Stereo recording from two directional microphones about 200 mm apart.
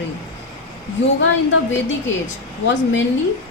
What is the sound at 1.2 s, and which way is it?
Speech, 70° left (ahead or behind).